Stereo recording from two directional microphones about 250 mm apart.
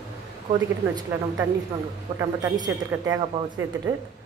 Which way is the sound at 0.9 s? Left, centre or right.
Centre.